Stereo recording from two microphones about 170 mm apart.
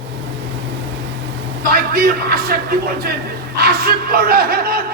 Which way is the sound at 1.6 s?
60° right (ahead or behind).